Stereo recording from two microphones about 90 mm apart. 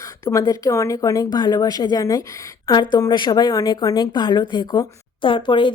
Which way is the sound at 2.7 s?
55° left (ahead or behind).